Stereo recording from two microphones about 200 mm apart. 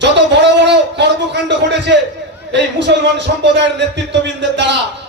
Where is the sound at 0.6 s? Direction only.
60° right (ahead or behind).